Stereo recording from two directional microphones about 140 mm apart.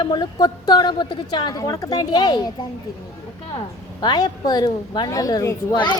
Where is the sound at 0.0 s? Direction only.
30° left (ahead or behind).